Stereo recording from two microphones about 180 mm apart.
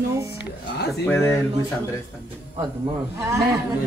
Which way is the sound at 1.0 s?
10° left (ahead or behind).